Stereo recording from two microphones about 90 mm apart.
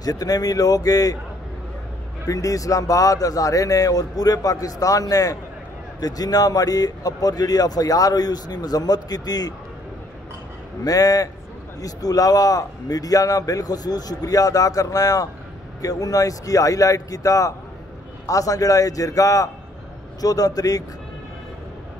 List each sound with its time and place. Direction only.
0.0 s speech: 45° left (ahead or behind)
2.2 s speech: 40° left (ahead or behind)
10.8 s speech: 45° left (ahead or behind)